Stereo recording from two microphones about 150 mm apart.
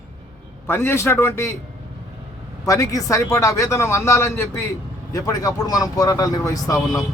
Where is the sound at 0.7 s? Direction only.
15° left (ahead or behind).